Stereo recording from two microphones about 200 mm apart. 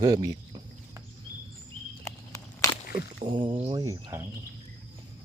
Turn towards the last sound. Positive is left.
turn(degrees=-15)  # may be behind; listen again after turning